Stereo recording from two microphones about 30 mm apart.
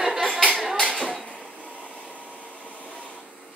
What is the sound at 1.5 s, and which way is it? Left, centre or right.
Vacuum cleaner, left.